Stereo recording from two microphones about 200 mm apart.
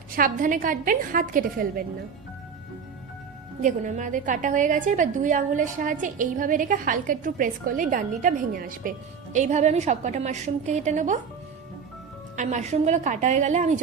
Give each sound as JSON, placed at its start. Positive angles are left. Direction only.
{"t": 0.2, "sound": "a woman's voice", "side_deg": -40}
{"t": 3.6, "sound": "a woman's voice", "side_deg": -40}
{"t": 12.4, "sound": "a woman's voice", "side_deg": -35}